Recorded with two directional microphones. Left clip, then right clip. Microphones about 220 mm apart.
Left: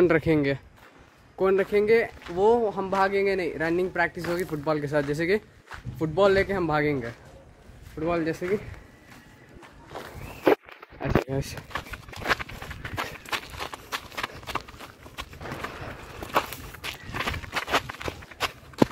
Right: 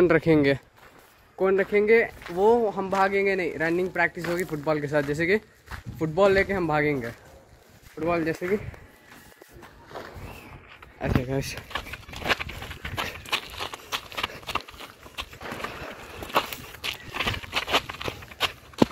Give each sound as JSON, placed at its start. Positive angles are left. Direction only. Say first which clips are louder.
{"t": 0.0, "sound": "speech", "louder": "right 1 dB", "side_deg": 0}
{"t": 1.4, "sound": "speech", "louder": "even", "side_deg": 15}
{"t": 1.7, "sound": "speech", "louder": "right 1 dB", "side_deg": 0}
{"t": 8.0, "sound": "speech", "louder": "right 1 dB", "side_deg": -5}
{"t": 11.0, "sound": "a sound", "louder": "left 1 dB", "side_deg": 0}
{"t": 16.2, "sound": "walk", "louder": "right 1 dB", "side_deg": 5}